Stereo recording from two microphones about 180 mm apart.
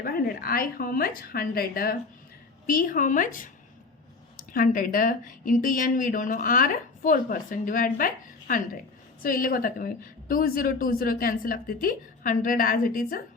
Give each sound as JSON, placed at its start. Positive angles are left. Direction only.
{"t": 0.0, "sound": "speech", "side_deg": 55}